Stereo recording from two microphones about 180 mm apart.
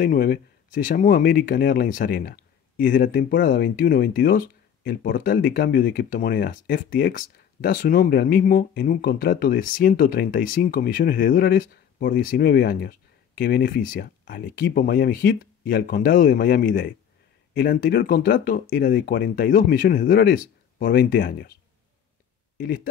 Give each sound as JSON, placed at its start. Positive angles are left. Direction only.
{"t": 0.0, "sound": "speech", "side_deg": 55}